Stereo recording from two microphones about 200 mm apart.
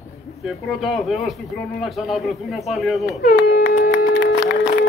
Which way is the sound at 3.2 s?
55° left (ahead or behind).